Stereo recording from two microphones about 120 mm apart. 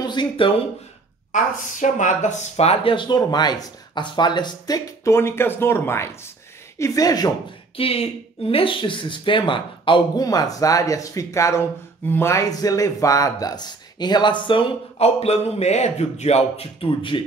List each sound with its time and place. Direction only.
0.0 s speech: 40° left (ahead or behind)
1.3 s speech: 90° left; by 7.3 s 35° left (ahead or behind)
7.7 s speech: 55° left (ahead or behind)